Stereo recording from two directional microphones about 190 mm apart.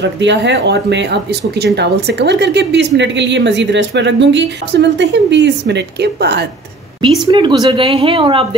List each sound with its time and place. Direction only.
0.0 s a woman's voice: 70° right (ahead or behind)
7.2 s speech: 25° right (ahead or behind)